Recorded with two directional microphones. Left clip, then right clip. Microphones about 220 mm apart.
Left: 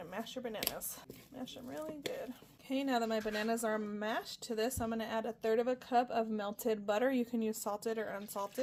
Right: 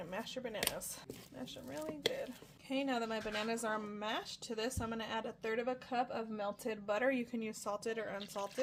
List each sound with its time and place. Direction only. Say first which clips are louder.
0.0 s speech: even; 20° left (ahead or behind)
2.6 s speech: left 3 dB; 30° left (ahead or behind)